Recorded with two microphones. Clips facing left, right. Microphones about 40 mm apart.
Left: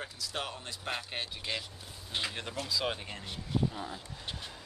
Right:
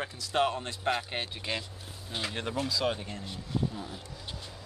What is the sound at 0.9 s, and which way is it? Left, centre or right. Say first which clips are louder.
Speech: right 4 dB; centre.